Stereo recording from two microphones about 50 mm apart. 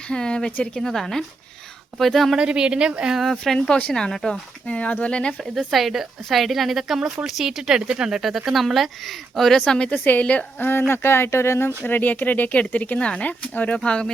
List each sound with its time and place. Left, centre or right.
0.1 s speech: centre
2.3 s speech: centre
3.4 s speech: centre
4.6 s speech: left
5.4 s speech: centre
8.2 s speech: centre
10.0 s speech: left
10.6 s speech: left
11.9 s speech: left
13.7 s speech: centre